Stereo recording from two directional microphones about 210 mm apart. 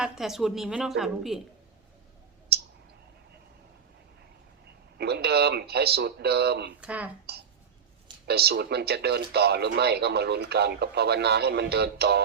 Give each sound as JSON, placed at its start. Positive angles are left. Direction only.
{"t": 0.0, "sound": "a woman's voice", "side_deg": 0}
{"t": 4.9, "sound": "speech", "side_deg": -50}
{"t": 6.8, "sound": "speech", "side_deg": -5}
{"t": 8.3, "sound": "speech", "side_deg": -50}